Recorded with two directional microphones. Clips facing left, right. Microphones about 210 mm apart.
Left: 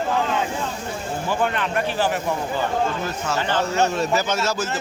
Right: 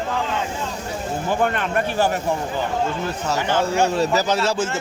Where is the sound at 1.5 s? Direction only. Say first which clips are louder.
Right 2 dB; 45° right (ahead or behind).